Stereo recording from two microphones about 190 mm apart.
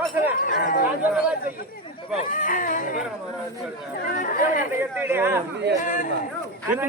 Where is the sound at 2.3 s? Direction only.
45° left (ahead or behind).